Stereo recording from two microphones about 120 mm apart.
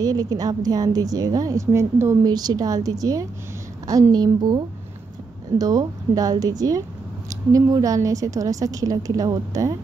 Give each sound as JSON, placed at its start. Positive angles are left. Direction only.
{"t": 0.0, "sound": "a woman's voice", "side_deg": -30}